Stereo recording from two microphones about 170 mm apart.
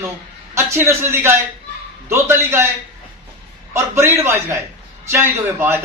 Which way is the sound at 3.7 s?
15° right (ahead or behind).